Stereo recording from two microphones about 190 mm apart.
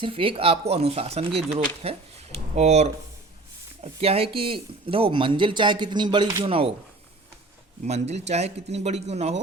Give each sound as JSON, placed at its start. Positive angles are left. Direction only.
{"t": 0.0, "sound": "speech", "side_deg": -30}
{"t": 4.0, "sound": "speech", "side_deg": -30}
{"t": 7.9, "sound": "speech", "side_deg": -35}